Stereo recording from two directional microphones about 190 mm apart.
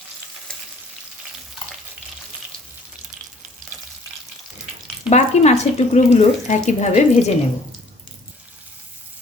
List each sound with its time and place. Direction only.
5.0 s speech: 35° left (ahead or behind)